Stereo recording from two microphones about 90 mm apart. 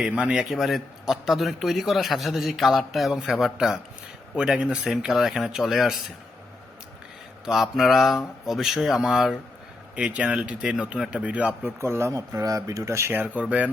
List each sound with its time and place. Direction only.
0.0 s a man's voice: 10° right (ahead or behind)
7.4 s a man's voice: 5° right (ahead or behind)
11.8 s speech: 30° right (ahead or behind); by 13.7 s 15° right (ahead or behind)